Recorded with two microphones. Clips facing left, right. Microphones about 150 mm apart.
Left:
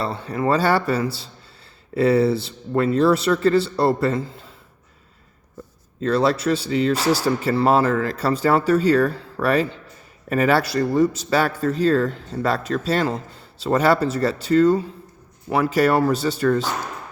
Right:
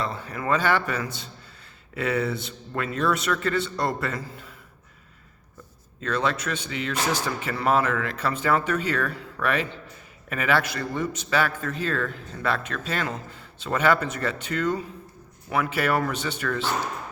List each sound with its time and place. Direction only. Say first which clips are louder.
0.0 s a man's voice: left 6 dB; 35° left (ahead or behind)
6.0 s a man's voice: left 7 dB; 35° left (ahead or behind)